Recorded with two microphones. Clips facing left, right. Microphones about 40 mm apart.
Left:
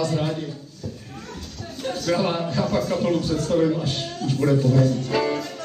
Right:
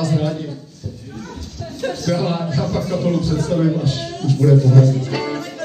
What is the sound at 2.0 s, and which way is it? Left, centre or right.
Speech, centre.